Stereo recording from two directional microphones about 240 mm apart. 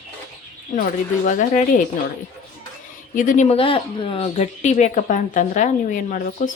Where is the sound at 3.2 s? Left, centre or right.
Left.